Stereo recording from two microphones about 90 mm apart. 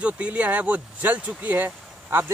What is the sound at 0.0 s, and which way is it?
Speech, 15° right (ahead or behind).